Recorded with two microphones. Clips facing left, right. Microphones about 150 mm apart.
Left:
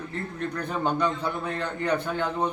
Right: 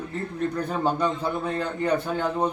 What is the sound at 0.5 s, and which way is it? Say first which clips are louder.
A man's voice: even; 10° right (ahead or behind).